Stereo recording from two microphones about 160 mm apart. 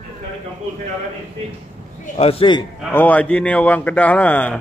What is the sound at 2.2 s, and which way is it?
Speech, 35° left (ahead or behind).